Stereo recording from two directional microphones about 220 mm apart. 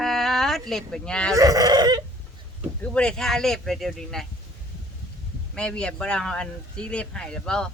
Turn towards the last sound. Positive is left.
turn(degrees=5)  # may be behind; listen again after turning